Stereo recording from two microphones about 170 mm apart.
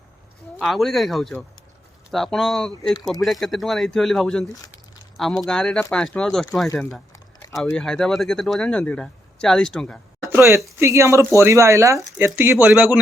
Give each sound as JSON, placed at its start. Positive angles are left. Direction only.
{"t": 0.6, "sound": "speech", "side_deg": 0}
{"t": 6.7, "sound": "a sound", "side_deg": 5}
{"t": 7.7, "sound": "speech", "side_deg": 5}
{"t": 10.2, "sound": "speech", "side_deg": -15}